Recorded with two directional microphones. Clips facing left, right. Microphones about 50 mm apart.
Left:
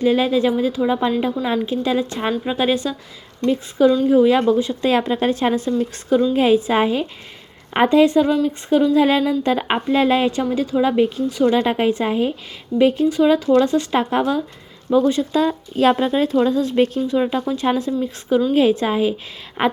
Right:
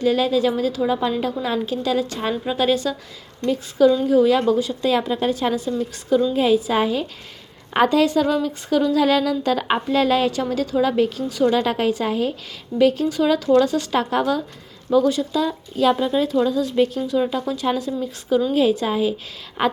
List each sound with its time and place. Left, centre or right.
0.0 s a woman's voice: left
4.8 s a woman's voice: left
15.3 s a woman's voice: left